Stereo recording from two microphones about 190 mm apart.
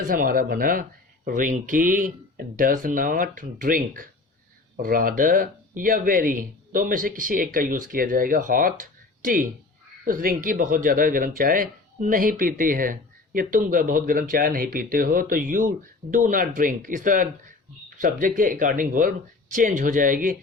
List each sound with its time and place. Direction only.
0.0 s speech: 45° right (ahead or behind)